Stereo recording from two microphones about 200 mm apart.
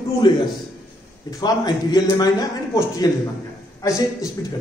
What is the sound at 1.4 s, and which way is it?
A man's voice, 20° left (ahead or behind).